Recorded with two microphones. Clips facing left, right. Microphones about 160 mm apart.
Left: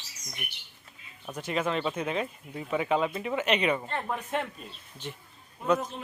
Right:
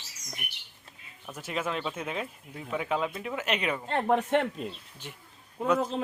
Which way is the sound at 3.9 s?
60° right (ahead or behind).